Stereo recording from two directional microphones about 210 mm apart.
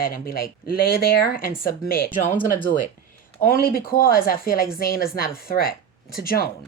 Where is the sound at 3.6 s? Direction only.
45° left (ahead or behind).